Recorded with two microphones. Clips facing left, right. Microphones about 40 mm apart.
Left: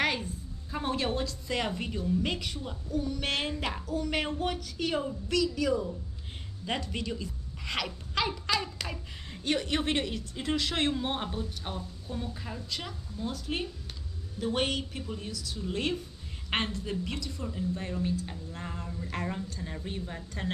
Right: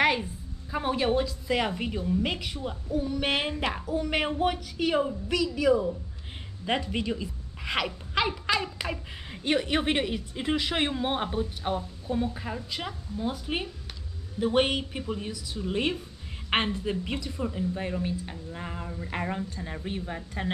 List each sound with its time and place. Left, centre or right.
0.0 s a woman's voice: centre